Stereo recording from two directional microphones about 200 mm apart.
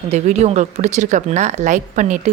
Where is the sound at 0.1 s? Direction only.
35° right (ahead or behind).